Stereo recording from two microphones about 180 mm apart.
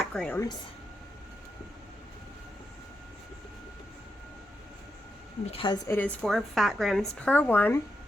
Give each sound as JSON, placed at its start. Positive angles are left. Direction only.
{"t": 0.0, "sound": "speech", "side_deg": 5}
{"t": 5.5, "sound": "speech", "side_deg": 30}
{"t": 5.9, "sound": "a woman's voice", "side_deg": 10}